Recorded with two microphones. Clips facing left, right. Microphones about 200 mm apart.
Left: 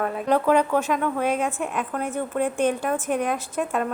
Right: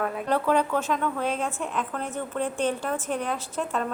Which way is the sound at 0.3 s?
15° left (ahead or behind).